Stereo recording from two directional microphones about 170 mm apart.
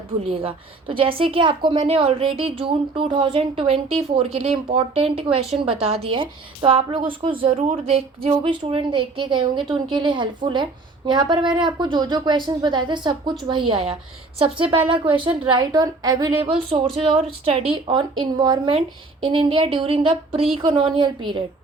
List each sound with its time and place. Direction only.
0.3 s a woman's voice: 30° right (ahead or behind)
15.1 s a woman's voice: 30° right (ahead or behind)
16.5 s a woman's voice: 30° right (ahead or behind)